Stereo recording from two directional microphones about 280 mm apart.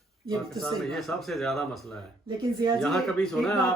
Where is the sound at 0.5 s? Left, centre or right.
Centre.